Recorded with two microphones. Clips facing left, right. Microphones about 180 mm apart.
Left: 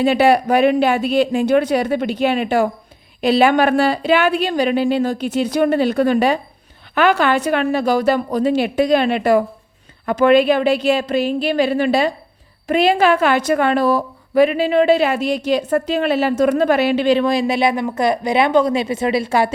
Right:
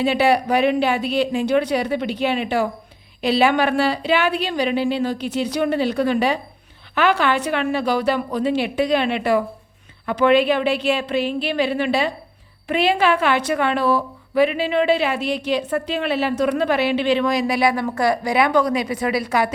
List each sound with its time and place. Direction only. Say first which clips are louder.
0.0 s a woman's voice: left 4 dB; 45° left (ahead or behind); by 19.5 s 30° left (ahead or behind)